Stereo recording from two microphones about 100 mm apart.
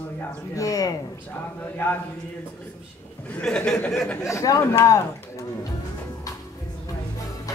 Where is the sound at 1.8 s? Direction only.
15° left (ahead or behind).